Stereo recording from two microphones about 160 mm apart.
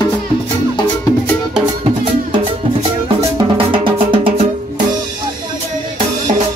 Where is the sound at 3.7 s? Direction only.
30° right (ahead or behind).